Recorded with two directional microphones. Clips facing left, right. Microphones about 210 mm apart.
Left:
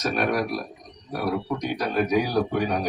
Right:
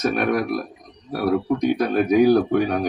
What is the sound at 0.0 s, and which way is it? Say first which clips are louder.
Speech: right 4 dB; 50° right (ahead or behind).